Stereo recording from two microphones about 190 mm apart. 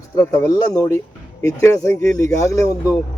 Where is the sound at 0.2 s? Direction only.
20° left (ahead or behind).